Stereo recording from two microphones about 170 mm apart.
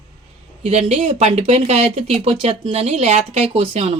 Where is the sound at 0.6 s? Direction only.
40° right (ahead or behind).